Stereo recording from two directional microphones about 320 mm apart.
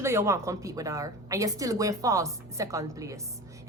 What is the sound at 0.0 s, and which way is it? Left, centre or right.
A woman's voice, centre.